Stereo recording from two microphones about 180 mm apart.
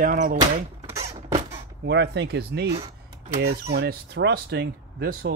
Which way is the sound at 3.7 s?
65° right (ahead or behind).